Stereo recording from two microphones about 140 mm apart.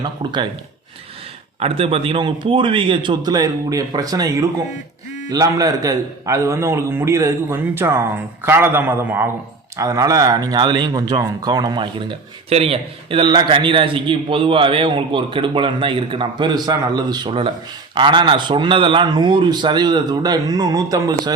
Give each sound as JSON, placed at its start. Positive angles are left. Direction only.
{"t": 0.0, "sound": "speech", "side_deg": -35}
{"t": 1.5, "sound": "a man's voice", "side_deg": -45}